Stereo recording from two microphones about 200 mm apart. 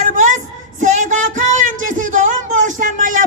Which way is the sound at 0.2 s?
40° right (ahead or behind).